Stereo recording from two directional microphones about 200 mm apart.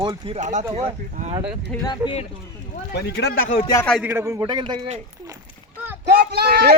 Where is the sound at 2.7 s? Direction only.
55° left (ahead or behind).